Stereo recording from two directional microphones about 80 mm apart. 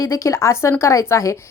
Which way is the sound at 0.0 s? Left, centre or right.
Left.